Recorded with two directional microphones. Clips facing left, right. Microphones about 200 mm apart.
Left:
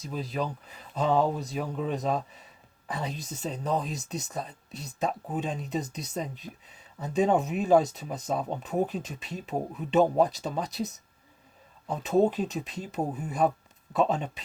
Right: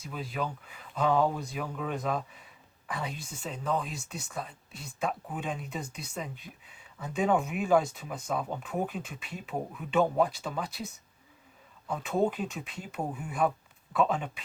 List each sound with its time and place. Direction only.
0.0 s speech: 40° left (ahead or behind)